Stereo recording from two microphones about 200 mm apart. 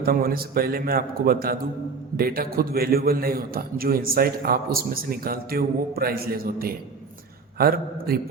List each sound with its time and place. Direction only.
0.0 s a man's voice: 45° right (ahead or behind)